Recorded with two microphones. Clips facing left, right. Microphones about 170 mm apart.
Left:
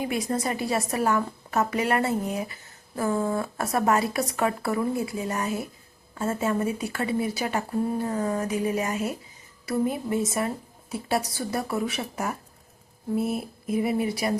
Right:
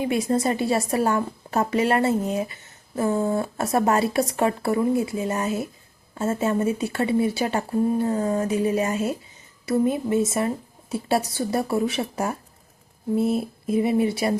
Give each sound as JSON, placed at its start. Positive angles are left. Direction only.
{"t": 0.0, "sound": "a woman's voice", "side_deg": -25}